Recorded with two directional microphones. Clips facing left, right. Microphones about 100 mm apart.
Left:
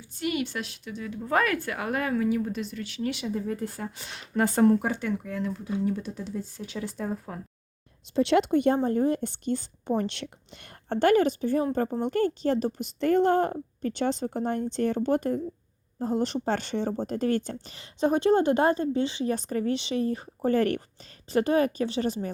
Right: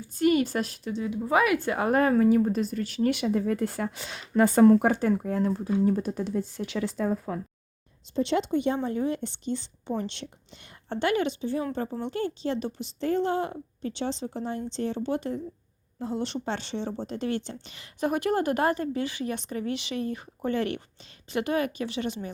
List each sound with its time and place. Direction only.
0.0 s speech: 40° right (ahead or behind)
0.9 s speech: 25° right (ahead or behind)
1.2 s speech: 10° right (ahead or behind)
1.5 s speech: 25° right (ahead or behind); by 4.0 s 80° right
4.9 s speech: 40° right (ahead or behind); by 6.9 s 85° right
8.1 s speech: 65° left (ahead or behind); by 9.9 s 45° left (ahead or behind)
10.0 s speech: 60° left (ahead or behind); by 12.9 s 40° left (ahead or behind)
13.0 s speech: 55° left (ahead or behind); by 19.3 s 25° left (ahead or behind)
19.3 s speech: 40° left (ahead or behind)